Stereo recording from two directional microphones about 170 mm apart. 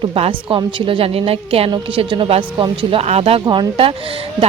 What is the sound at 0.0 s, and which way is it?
Speech, 30° right (ahead or behind).